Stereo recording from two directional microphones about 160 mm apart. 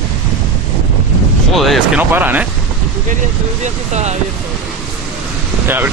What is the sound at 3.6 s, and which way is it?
Speech, 45° right (ahead or behind).